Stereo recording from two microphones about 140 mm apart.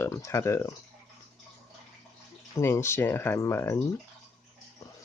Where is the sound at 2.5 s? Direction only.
20° left (ahead or behind).